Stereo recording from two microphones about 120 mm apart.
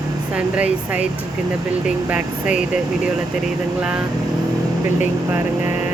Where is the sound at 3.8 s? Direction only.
10° right (ahead or behind).